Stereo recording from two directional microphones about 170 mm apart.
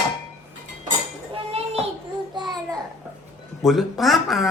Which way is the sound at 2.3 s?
25° right (ahead or behind).